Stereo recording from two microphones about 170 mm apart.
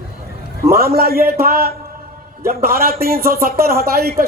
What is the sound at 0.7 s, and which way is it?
A man's voice, 60° right (ahead or behind).